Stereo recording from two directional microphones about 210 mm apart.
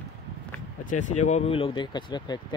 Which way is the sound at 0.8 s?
35° left (ahead or behind).